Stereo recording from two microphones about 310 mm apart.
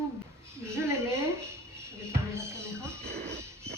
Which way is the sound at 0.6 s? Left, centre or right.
Centre.